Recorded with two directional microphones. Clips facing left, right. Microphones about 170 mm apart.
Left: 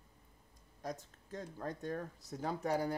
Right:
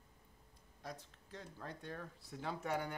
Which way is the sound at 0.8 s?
45° left (ahead or behind).